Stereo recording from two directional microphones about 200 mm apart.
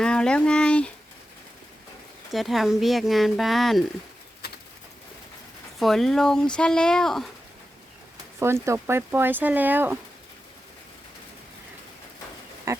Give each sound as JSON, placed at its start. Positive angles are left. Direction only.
{"t": 0.0, "sound": "speech", "side_deg": 5}
{"t": 2.3, "sound": "speech", "side_deg": 0}
{"t": 4.4, "sound": "bird", "side_deg": 55}
{"t": 5.8, "sound": "speech", "side_deg": 0}
{"t": 8.6, "sound": "speech", "side_deg": -15}
{"t": 12.7, "sound": "pig", "side_deg": -15}